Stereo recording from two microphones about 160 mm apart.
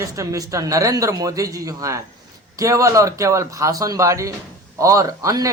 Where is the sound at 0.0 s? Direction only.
20° right (ahead or behind).